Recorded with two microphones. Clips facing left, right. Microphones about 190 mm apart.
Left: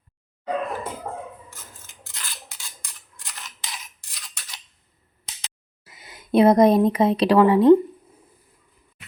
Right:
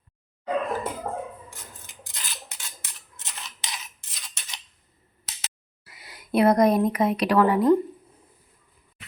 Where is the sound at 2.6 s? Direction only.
Centre (ahead or behind).